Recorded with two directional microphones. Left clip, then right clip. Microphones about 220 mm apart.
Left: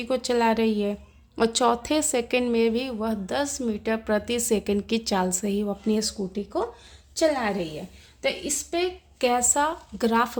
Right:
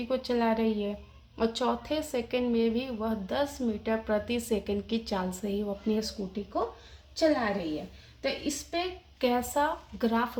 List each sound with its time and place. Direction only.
0.0 s a woman's voice: 50° left (ahead or behind)